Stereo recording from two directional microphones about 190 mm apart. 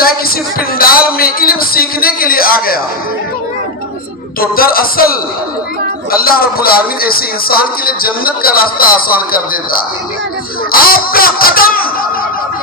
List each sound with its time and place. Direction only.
0.8 s a man's voice: 50° left (ahead or behind)
4.4 s music: 50° left (ahead or behind)